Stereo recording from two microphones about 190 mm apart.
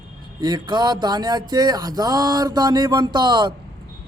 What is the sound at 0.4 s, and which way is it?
Music, 20° right (ahead or behind).